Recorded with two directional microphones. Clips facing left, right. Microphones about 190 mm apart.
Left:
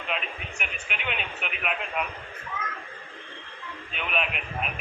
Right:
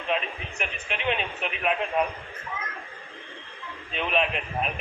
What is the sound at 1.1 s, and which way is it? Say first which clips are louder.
Speech: right 4 dB; 35° right (ahead or behind).